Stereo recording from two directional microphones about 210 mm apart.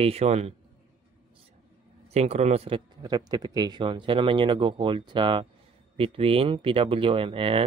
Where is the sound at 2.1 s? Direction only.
30° right (ahead or behind).